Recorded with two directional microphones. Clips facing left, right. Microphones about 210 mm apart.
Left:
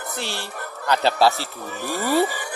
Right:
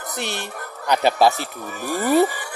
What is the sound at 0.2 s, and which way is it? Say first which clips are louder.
Speech: right 4 dB; 20° right (ahead or behind).